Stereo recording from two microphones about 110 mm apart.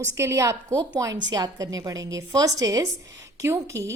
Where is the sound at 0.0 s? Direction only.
25° right (ahead or behind).